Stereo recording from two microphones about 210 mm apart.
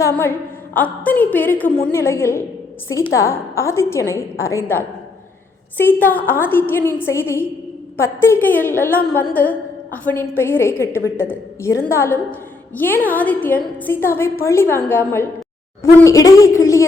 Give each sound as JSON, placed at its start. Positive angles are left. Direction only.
{"t": 0.0, "sound": "a woman's voice", "side_deg": 10}